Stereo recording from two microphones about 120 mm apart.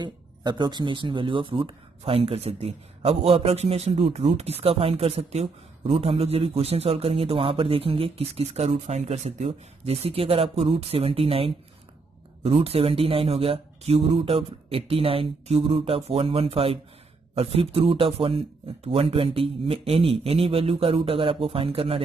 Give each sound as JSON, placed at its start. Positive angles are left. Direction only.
{"t": 0.0, "sound": "speech", "side_deg": -40}